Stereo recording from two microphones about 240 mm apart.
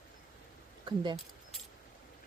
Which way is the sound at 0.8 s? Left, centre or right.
Centre.